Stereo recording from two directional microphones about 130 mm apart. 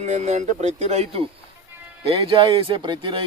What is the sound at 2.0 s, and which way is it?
Speech, 45° right (ahead or behind).